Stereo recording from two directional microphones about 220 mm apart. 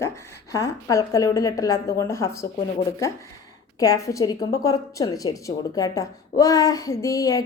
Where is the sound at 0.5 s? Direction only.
15° left (ahead or behind).